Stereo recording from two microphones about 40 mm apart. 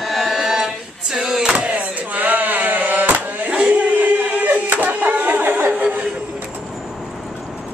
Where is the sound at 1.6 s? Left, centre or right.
Right.